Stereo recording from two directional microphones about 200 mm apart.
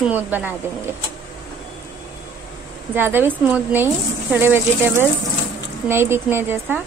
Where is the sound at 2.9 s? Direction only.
10° right (ahead or behind).